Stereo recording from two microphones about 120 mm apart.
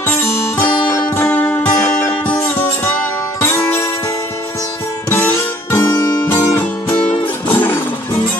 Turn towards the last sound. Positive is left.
turn(degrees=15)  # may be behind; listen again after turning